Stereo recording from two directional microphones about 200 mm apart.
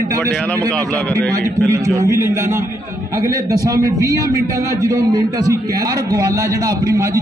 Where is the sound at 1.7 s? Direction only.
15° right (ahead or behind).